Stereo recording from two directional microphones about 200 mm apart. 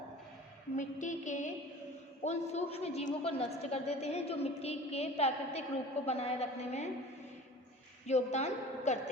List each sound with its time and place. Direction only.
0.8 s a woman's voice: 40° left (ahead or behind)
8.0 s a woman's voice: 35° left (ahead or behind)